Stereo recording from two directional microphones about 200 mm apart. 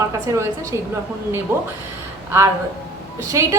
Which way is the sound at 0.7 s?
20° left (ahead or behind).